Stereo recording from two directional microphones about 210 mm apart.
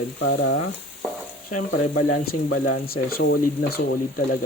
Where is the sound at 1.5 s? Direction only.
80° left.